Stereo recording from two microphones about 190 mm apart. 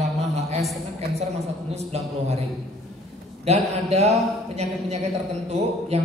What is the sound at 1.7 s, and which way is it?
Speech, 35° right (ahead or behind).